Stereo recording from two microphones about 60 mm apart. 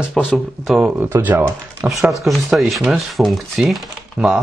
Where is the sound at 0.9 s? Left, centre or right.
Right.